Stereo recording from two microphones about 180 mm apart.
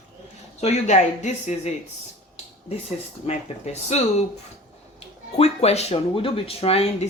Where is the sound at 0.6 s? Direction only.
40° left (ahead or behind).